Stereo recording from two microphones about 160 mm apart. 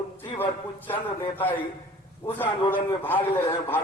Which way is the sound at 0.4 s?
30° left (ahead or behind).